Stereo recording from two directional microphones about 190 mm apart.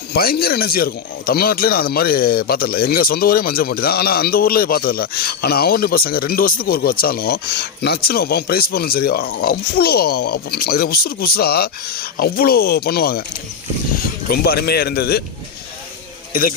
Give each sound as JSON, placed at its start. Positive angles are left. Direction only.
{"t": 0.1, "sound": "speech", "side_deg": 55}
{"t": 14.3, "sound": "speech", "side_deg": 55}